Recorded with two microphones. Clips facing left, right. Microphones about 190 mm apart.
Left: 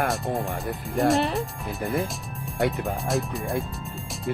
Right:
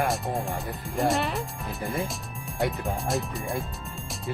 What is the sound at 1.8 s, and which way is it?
Speech, 55° left (ahead or behind).